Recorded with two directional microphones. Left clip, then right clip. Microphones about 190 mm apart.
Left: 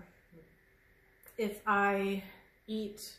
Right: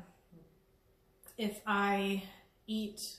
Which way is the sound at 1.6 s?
25° left (ahead or behind).